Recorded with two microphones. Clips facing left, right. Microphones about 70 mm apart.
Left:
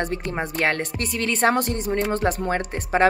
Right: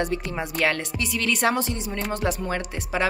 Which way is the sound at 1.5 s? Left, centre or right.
Left.